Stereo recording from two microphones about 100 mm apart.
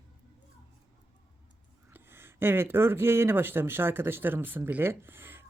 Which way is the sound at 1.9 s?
25° right (ahead or behind).